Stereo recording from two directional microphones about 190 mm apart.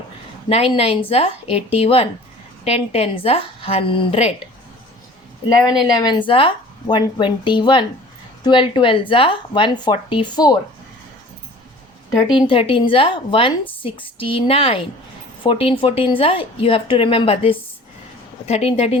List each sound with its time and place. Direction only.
0.4 s a woman's voice: 30° left (ahead or behind)
6.0 s speech: 25° left (ahead or behind)
12.3 s a woman's voice: 30° left (ahead or behind)